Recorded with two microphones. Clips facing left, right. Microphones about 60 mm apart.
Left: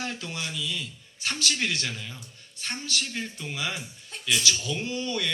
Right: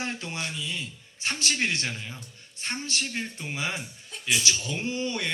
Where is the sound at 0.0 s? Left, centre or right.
Right.